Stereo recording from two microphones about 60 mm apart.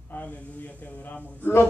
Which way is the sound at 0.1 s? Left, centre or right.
Left.